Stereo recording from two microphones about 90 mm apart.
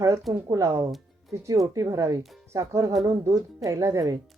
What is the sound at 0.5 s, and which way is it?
Speech, 35° right (ahead or behind).